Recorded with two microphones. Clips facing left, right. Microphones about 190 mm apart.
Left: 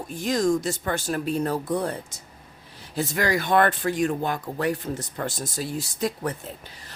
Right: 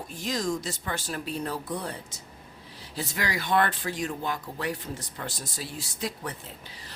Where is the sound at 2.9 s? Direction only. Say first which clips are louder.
Left 7 dB; 50° left (ahead or behind).